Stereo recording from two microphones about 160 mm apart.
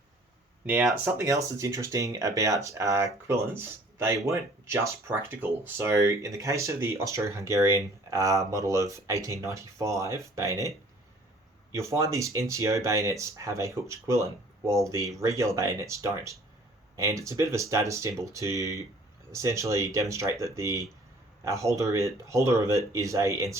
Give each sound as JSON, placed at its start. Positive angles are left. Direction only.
{"t": 0.6, "sound": "speech", "side_deg": -10}
{"t": 11.7, "sound": "speech", "side_deg": -20}